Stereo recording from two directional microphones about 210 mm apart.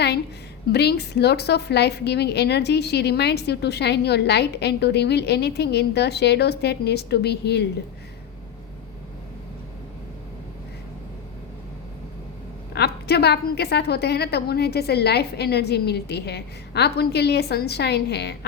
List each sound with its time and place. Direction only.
0.7 s a woman's voice: 50° left (ahead or behind)
12.7 s a woman's voice: 50° left (ahead or behind)